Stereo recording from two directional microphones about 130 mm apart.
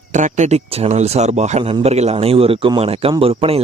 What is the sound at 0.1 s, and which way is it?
A man's voice, 70° right (ahead or behind).